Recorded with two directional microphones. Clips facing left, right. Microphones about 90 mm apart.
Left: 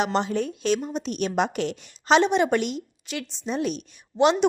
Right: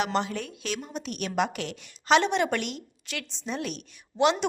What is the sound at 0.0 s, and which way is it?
A woman's voice, 25° left (ahead or behind).